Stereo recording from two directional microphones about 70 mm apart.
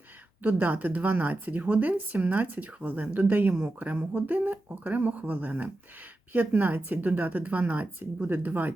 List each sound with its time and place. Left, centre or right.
0.4 s speech: right